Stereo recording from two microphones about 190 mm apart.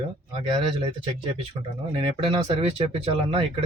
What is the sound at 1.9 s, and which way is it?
Speech, 30° right (ahead or behind).